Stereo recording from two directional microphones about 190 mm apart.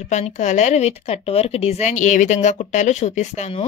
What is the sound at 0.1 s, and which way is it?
A woman's voice, 40° left (ahead or behind).